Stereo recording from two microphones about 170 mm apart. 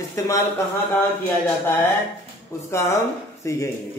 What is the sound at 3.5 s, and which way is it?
Speech, 15° left (ahead or behind).